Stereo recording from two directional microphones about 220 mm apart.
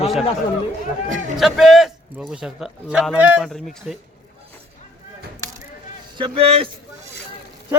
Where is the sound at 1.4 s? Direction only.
Centre (ahead or behind).